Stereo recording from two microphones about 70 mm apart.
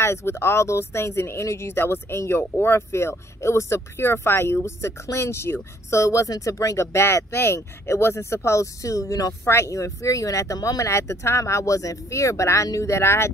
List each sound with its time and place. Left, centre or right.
0.0 s speech: left
9.4 s speech: left
11.0 s speech: left